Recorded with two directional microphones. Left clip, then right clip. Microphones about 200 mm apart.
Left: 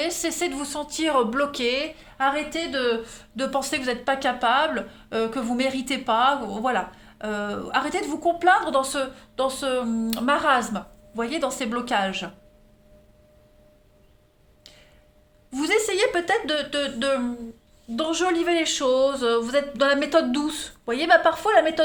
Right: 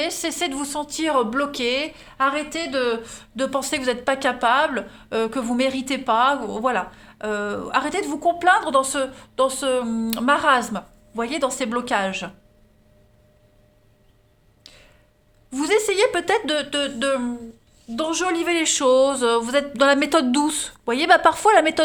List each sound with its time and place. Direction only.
0.0 s speech: 30° right (ahead or behind)
15.4 s speech: 35° right (ahead or behind)